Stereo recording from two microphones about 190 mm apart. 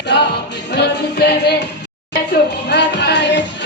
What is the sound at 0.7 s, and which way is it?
Music, 60° left (ahead or behind).